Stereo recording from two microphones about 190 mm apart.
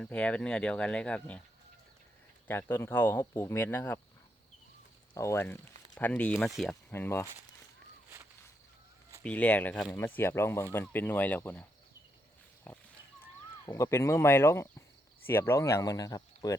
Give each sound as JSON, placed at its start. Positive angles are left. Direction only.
{"t": 0.0, "sound": "speech", "side_deg": 5}
{"t": 2.5, "sound": "speech", "side_deg": 10}
{"t": 5.1, "sound": "speech", "side_deg": 15}
{"t": 6.9, "sound": "speech", "side_deg": 10}
{"t": 9.2, "sound": "speech", "side_deg": 10}
{"t": 12.7, "sound": "pig", "side_deg": 10}
{"t": 13.7, "sound": "speech", "side_deg": 15}